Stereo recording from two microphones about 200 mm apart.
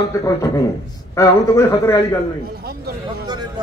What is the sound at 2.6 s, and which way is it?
Speech, 50° right (ahead or behind).